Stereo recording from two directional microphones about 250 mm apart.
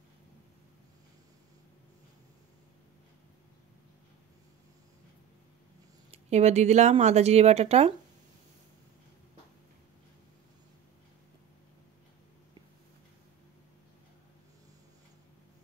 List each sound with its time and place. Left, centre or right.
6.1 s speech: right